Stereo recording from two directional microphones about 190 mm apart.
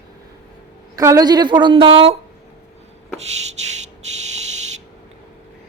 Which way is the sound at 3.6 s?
35° right (ahead or behind).